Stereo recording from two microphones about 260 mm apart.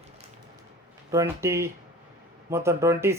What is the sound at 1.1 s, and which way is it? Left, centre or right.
Speech, centre.